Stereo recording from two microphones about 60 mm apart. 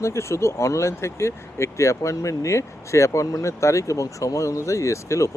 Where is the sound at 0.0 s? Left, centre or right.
Left.